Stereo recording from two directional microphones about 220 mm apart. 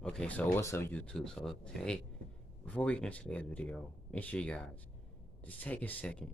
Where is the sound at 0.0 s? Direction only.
5° left (ahead or behind).